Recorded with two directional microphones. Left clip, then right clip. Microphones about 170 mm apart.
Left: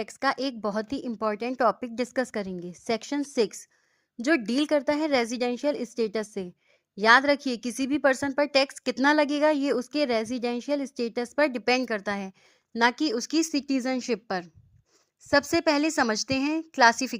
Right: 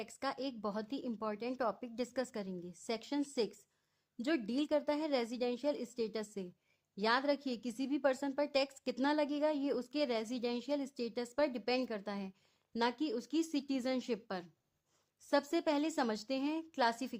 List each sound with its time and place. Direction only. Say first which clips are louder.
0.0 s a woman's voice: left 13 dB; 35° left (ahead or behind)